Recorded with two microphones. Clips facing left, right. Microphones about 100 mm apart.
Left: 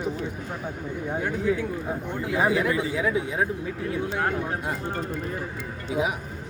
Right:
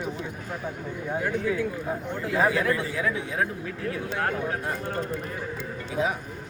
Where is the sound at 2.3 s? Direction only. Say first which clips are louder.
Even; 15° left (ahead or behind).